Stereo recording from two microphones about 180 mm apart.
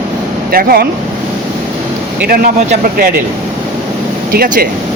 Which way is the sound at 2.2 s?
55° right (ahead or behind).